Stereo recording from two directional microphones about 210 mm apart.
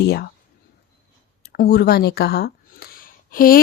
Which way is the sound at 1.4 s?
45° left (ahead or behind).